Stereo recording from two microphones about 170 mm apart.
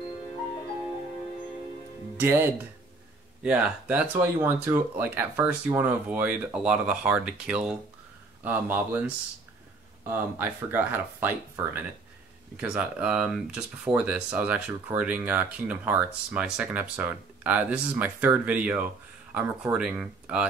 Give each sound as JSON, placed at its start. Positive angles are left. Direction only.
{"t": 2.1, "sound": "speech", "side_deg": -15}